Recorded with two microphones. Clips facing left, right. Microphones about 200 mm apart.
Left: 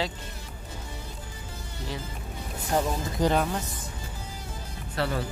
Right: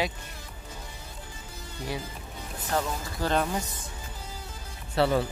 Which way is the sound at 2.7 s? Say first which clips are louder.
Left 3 dB; 15° left (ahead or behind).